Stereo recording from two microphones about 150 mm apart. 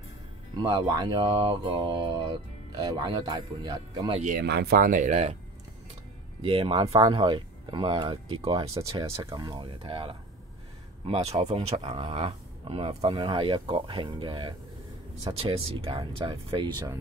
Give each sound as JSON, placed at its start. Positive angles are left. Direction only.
{"t": 0.6, "sound": "speech", "side_deg": -30}
{"t": 4.2, "sound": "speech", "side_deg": -75}
{"t": 6.4, "sound": "speech", "side_deg": -35}
{"t": 8.8, "sound": "speech", "side_deg": -20}
{"t": 9.1, "sound": "speech", "side_deg": -35}